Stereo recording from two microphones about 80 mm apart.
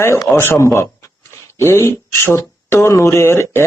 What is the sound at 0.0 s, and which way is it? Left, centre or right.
Speech, left.